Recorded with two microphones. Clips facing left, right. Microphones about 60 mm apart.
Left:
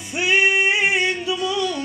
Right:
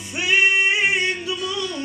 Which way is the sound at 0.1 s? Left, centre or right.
Centre.